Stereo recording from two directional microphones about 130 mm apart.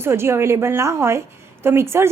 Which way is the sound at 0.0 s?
20° right (ahead or behind).